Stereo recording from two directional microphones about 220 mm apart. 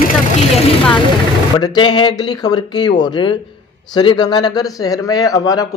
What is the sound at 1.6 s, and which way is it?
Speech, 20° left (ahead or behind).